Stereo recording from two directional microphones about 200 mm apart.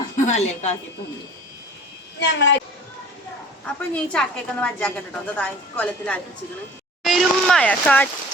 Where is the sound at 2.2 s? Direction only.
65° left (ahead or behind).